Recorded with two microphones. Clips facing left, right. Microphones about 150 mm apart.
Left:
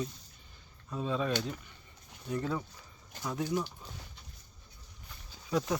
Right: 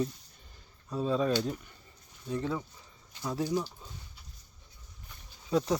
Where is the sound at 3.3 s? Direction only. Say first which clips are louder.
Right 2 dB; 35° right (ahead or behind).